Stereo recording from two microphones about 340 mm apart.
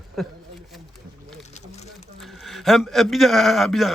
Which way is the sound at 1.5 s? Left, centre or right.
Centre.